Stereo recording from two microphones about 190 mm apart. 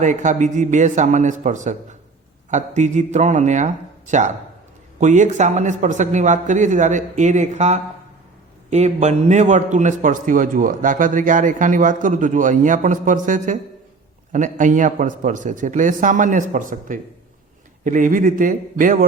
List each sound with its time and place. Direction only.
0.0 s a man's voice: 40° right (ahead or behind)